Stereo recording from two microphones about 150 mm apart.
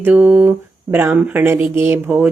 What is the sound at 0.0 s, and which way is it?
Speech, 10° right (ahead or behind).